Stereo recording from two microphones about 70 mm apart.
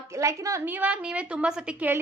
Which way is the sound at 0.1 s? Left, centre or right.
Right.